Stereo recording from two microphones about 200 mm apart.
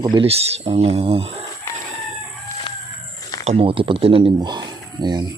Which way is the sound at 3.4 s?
30° right (ahead or behind).